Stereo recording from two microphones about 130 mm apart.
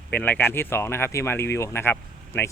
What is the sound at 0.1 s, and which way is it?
Speech, 15° left (ahead or behind).